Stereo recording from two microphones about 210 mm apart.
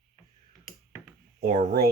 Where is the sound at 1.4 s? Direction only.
35° right (ahead or behind).